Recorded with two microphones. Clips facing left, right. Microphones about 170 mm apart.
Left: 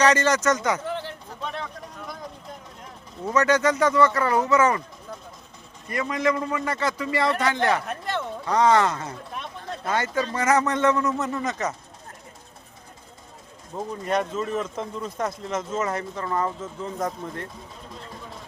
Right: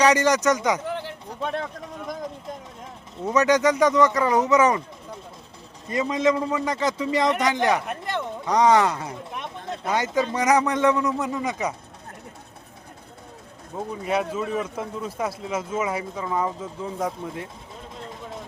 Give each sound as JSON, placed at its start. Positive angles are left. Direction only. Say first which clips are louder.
{"t": 0.0, "sound": "speech", "louder": "right 1 dB", "side_deg": -15}
{"t": 3.2, "sound": "speech", "louder": "right 2 dB", "side_deg": -15}
{"t": 5.9, "sound": "a man's voice", "louder": "right 3 dB", "side_deg": -20}
{"t": 13.7, "sound": "speech", "louder": "even", "side_deg": -5}